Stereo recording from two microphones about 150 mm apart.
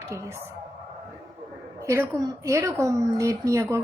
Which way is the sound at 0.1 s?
15° right (ahead or behind).